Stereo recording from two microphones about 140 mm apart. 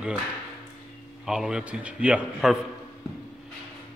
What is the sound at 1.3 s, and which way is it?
A man's voice, 5° right (ahead or behind).